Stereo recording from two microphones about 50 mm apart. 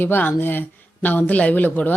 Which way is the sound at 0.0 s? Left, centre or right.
Left.